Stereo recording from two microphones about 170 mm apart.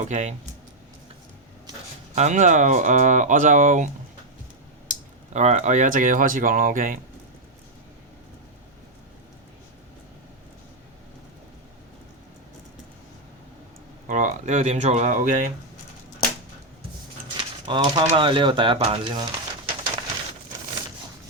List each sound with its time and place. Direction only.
0.0 s speech: 45° right (ahead or behind)
2.1 s speech: 45° right (ahead or behind)
4.9 s speech: 40° right (ahead or behind)
14.1 s speech: 45° right (ahead or behind)
17.2 s a sound: 25° right (ahead or behind)
18.0 s speech: 30° right (ahead or behind)